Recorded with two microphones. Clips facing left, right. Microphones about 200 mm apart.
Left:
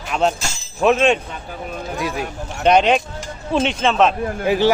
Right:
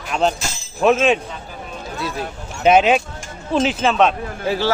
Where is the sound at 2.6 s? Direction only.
5° right (ahead or behind).